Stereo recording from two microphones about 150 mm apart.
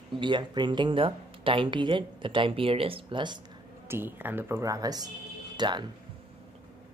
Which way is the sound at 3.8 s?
15° right (ahead or behind).